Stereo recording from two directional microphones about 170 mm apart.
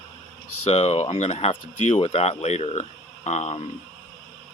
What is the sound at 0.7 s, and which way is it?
Speech, 40° left (ahead or behind).